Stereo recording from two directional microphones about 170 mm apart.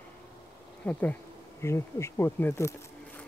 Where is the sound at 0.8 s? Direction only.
10° left (ahead or behind).